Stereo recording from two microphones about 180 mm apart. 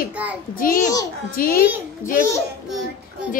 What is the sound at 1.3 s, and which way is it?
Speech, 55° left (ahead or behind).